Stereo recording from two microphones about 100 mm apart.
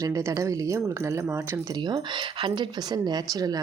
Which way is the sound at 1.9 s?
50° right (ahead or behind).